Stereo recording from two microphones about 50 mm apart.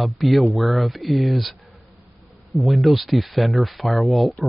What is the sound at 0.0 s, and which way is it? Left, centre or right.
Speech, centre.